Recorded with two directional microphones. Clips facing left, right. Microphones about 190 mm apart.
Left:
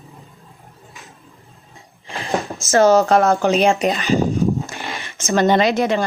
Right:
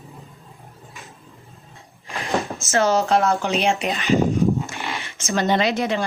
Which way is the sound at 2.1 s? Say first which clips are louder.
Left 1 dB; 35° left (ahead or behind).